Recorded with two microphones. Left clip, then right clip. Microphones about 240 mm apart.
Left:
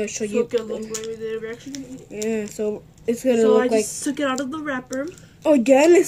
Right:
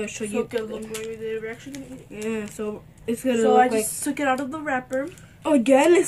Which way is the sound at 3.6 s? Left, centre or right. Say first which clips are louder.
Even; centre.